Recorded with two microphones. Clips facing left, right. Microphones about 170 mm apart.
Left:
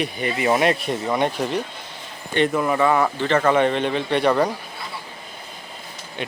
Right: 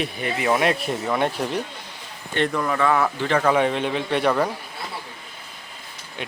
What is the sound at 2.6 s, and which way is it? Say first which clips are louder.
Speech: left 1 dB; 10° left (ahead or behind).